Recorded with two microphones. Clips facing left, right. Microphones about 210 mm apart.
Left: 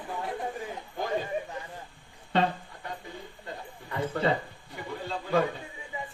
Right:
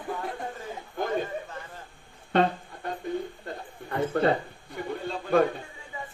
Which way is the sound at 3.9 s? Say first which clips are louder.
Right 4 dB; 55° right (ahead or behind).